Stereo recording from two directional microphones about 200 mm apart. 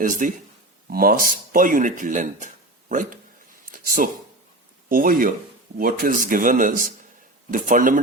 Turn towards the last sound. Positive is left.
turn(degrees=-40)  # may be behind; listen again after turning